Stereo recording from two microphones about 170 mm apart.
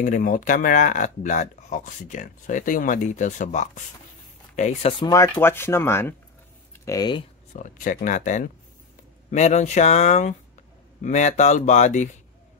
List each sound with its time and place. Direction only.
0.0 s speech: 50° left (ahead or behind)
5.0 s speech: 20° left (ahead or behind)
7.5 s speech: 50° left (ahead or behind)